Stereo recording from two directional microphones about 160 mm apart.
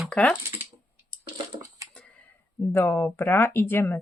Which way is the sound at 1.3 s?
25° right (ahead or behind).